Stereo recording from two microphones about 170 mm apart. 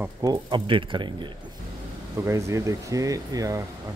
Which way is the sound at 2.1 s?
15° right (ahead or behind).